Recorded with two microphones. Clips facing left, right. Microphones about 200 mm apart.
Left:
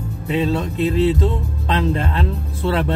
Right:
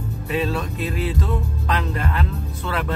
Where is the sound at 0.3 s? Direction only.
25° left (ahead or behind).